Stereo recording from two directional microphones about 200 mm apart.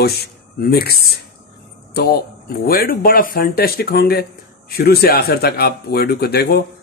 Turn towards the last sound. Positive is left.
turn(degrees=55)  # may be behind; listen again after turning